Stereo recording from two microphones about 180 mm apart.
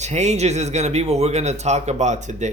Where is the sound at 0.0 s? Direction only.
40° right (ahead or behind).